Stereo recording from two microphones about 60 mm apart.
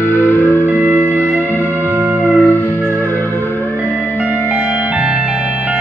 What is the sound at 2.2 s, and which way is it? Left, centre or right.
Music, left.